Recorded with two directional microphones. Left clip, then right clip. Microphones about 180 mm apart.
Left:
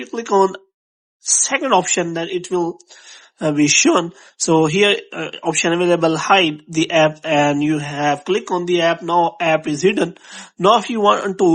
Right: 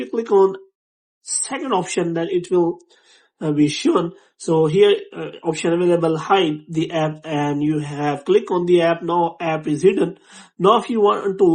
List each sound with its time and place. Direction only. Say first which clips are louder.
0.0 s speech: even; 25° left (ahead or behind)
3.3 s speech: left 5 dB; 40° left (ahead or behind)